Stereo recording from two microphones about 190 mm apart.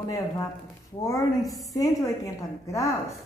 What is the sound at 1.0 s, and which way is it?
A woman's voice, 20° left (ahead or behind).